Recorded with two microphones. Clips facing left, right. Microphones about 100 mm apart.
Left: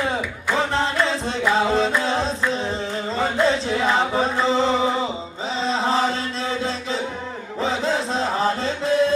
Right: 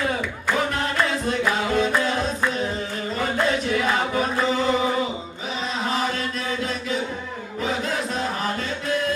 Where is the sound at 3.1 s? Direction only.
25° left (ahead or behind).